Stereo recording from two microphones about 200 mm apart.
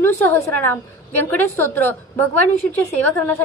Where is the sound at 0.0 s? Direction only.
10° left (ahead or behind).